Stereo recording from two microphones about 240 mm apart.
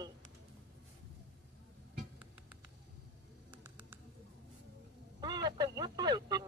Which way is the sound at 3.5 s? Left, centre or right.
Centre.